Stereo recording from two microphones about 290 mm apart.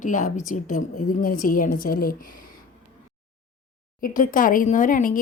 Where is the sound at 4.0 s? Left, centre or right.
Left.